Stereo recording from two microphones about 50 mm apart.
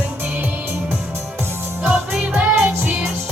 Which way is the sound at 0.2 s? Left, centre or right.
Right.